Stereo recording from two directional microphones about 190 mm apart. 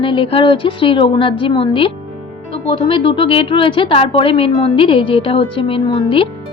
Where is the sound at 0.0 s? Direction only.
25° left (ahead or behind).